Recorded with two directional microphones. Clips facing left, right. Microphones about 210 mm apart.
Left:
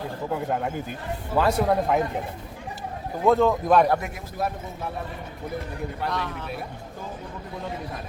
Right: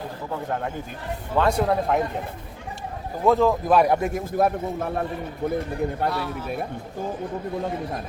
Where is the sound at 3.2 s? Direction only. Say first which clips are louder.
Even; centre (ahead or behind).